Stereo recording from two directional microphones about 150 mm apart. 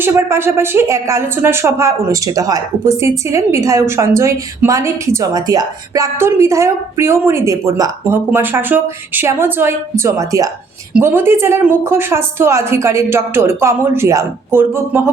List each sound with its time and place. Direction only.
0.0 s a woman's voice: 15° right (ahead or behind)